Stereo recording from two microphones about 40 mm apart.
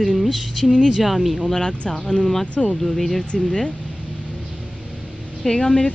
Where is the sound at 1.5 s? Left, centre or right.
Centre.